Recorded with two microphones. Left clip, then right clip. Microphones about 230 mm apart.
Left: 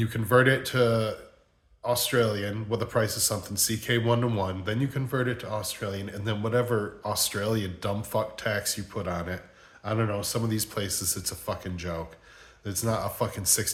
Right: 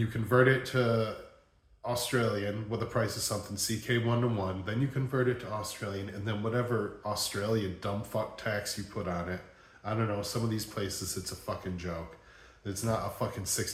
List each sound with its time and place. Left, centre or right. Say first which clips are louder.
0.0 s speech: left 4 dB; left